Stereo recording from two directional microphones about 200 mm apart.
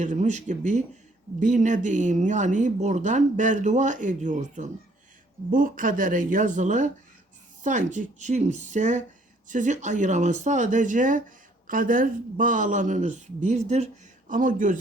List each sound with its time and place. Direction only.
0.0 s speech: 35° right (ahead or behind)